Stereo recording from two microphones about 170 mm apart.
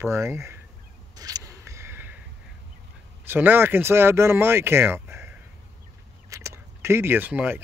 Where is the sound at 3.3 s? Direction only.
10° right (ahead or behind).